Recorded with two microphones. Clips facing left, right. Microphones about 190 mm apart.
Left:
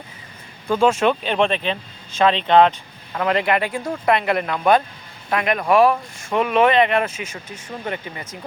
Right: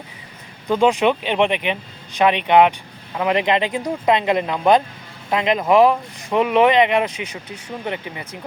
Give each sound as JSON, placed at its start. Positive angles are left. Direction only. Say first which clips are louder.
{"t": 0.7, "sound": "speech", "louder": "right 1 dB", "side_deg": -15}